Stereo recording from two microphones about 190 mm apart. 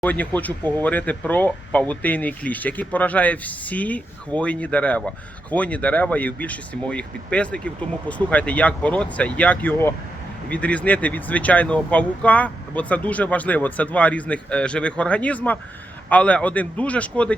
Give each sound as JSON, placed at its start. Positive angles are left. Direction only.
{"t": 0.0, "sound": "speech", "side_deg": 10}